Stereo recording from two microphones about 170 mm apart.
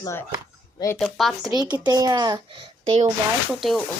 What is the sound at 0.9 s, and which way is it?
Speech, centre (ahead or behind).